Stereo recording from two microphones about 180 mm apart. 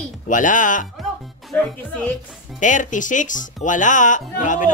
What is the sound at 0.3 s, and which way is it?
Speech, 45° left (ahead or behind).